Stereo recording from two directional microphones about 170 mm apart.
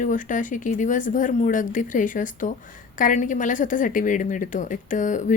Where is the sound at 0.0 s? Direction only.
50° left (ahead or behind).